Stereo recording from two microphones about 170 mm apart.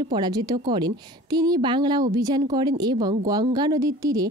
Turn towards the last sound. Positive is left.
turn(degrees=-20)  # may be behind; listen again after turning